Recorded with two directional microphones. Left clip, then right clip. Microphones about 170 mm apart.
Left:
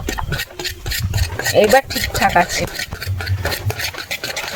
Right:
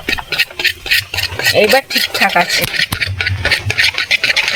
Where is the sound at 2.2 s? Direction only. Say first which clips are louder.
Even; 5° right (ahead or behind).